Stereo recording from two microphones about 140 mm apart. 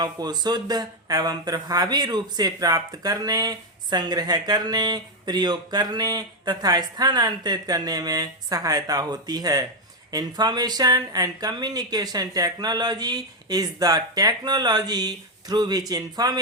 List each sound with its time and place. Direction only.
0.0 s speech: 30° right (ahead or behind)